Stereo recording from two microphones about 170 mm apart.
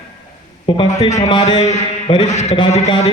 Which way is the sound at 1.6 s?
40° left (ahead or behind).